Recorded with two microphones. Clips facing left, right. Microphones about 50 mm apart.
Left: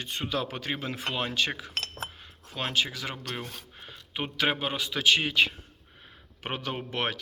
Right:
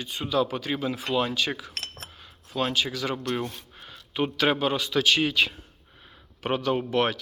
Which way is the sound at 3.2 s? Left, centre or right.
Centre.